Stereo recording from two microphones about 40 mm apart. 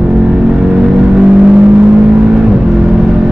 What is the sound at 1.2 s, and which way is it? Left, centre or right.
Vehicle, centre.